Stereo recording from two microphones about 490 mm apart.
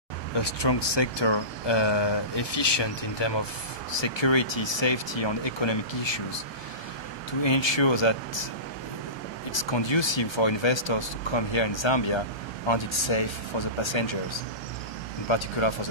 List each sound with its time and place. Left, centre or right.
0.4 s speech: left
7.4 s speech: left
9.7 s speech: left
15.2 s speech: left